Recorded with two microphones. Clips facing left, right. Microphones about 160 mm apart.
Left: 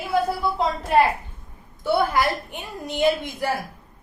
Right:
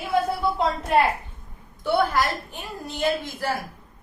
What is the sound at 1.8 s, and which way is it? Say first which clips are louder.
A woman's voice: left 1 dB; 10° left (ahead or behind).